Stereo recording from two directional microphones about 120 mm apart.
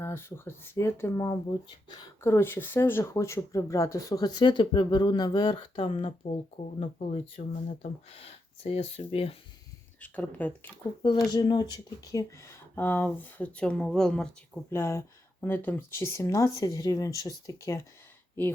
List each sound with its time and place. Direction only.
0.0 s speech: 20° left (ahead or behind); by 6.3 s 50° left (ahead or behind)
6.6 s speech: 65° left (ahead or behind)
10.0 s speech: 15° left (ahead or behind)
11.0 s speech: 35° left (ahead or behind); by 14.6 s 5° left (ahead or behind)
14.7 s speech: 20° left (ahead or behind)